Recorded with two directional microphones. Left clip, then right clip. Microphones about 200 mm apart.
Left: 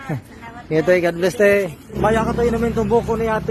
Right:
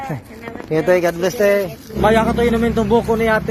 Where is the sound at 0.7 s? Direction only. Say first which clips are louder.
Right 1 dB; 20° left (ahead or behind).